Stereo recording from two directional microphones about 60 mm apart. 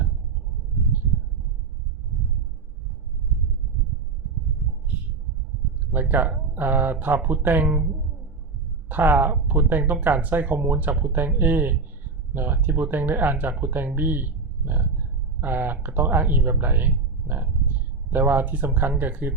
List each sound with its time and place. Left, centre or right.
3.3 s a sound: centre
4.9 s heart sounds: right
5.9 s speech: right